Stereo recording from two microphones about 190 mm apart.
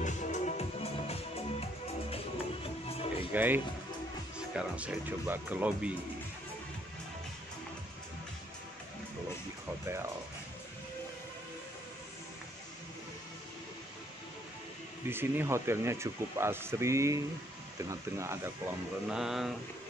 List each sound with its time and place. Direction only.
0.0 s music: 40° left (ahead or behind)
3.3 s speech: 10° right (ahead or behind)
15.0 s speech: 10° right (ahead or behind)
19.0 s speech: centre (ahead or behind)